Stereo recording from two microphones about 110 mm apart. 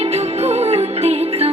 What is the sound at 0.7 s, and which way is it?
Music, 65° right (ahead or behind).